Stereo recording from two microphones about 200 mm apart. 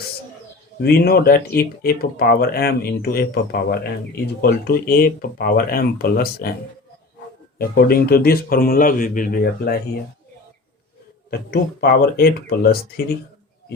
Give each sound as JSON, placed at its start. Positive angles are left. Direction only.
{"t": 0.8, "sound": "speech", "side_deg": 50}
{"t": 7.6, "sound": "speech", "side_deg": 50}
{"t": 11.3, "sound": "speech", "side_deg": 50}